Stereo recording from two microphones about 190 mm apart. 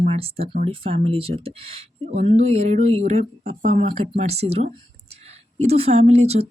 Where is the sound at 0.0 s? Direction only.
30° right (ahead or behind).